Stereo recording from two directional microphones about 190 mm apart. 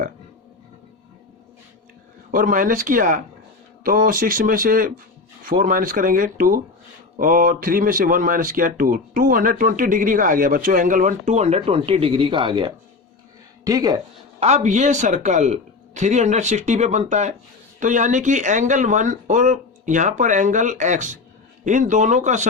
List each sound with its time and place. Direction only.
2.3 s speech: 45° right (ahead or behind); by 14.0 s 20° right (ahead or behind)
14.3 s speech: 35° right (ahead or behind)